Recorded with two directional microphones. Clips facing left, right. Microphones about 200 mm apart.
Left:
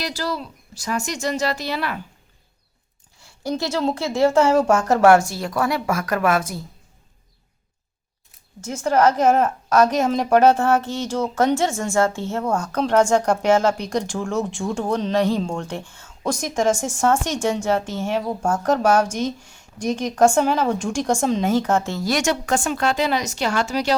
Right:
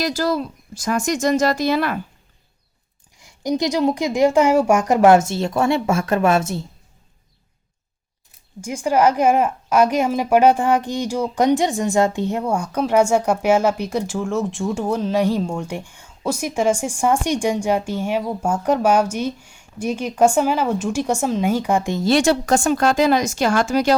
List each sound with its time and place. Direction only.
0.0 s speech: 45° right (ahead or behind)
3.2 s a woman's voice: 15° right (ahead or behind)
8.6 s a woman's voice: 10° right (ahead or behind); by 23.9 s 50° right (ahead or behind)